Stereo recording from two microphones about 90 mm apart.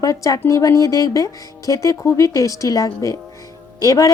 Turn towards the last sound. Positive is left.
turn(degrees=40)  # may be behind; listen again after turning